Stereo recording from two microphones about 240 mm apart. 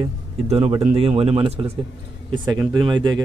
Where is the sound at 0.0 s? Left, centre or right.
Right.